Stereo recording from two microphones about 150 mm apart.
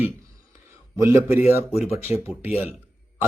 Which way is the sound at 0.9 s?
15° right (ahead or behind).